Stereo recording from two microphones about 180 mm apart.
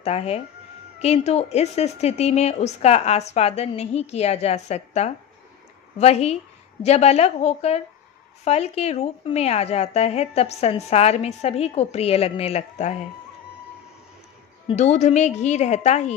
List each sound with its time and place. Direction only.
0.0 s a woman's voice: 35° left (ahead or behind)
14.7 s a woman's voice: 40° left (ahead or behind)